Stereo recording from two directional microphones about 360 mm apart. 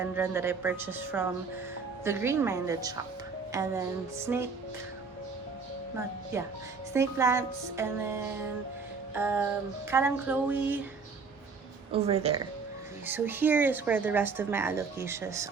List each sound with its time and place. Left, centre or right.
0.0 s a woman's voice: centre
6.3 s a woman's voice: centre
11.9 s a woman's voice: centre
13.1 s speech: centre